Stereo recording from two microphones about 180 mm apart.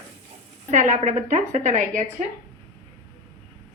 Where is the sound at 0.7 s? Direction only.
40° right (ahead or behind).